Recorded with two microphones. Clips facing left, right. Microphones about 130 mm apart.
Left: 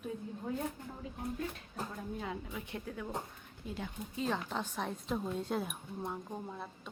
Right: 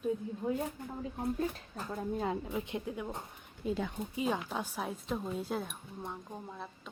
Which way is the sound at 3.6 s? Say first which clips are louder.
Right 9 dB; 90° right.